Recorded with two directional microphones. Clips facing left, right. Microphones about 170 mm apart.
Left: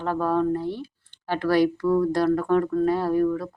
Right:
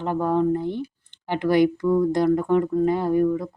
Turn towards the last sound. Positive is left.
turn(degrees=-20)  # may be behind; listen again after turning